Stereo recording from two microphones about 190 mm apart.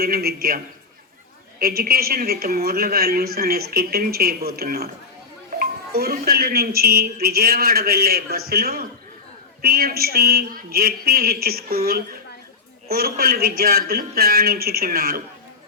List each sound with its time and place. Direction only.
0.0 s speech: 55° right (ahead or behind)